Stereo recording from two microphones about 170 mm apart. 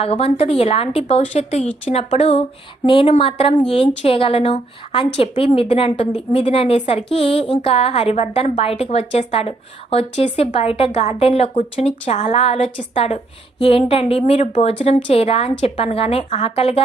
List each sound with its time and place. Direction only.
0.0 s a woman's voice: 35° left (ahead or behind)